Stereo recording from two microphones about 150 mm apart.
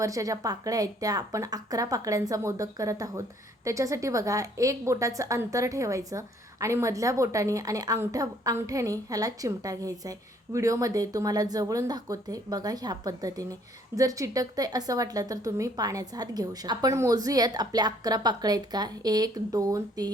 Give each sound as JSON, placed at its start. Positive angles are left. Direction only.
{"t": 0.0, "sound": "speech", "side_deg": -20}